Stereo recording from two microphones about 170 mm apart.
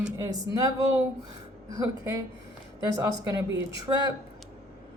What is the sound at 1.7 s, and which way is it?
A woman's voice, 20° right (ahead or behind).